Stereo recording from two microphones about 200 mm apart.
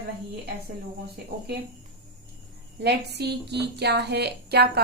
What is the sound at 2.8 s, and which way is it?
A woman's voice, 55° right (ahead or behind).